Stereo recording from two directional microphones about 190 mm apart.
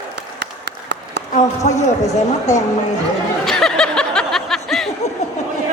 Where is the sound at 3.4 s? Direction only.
Centre (ahead or behind).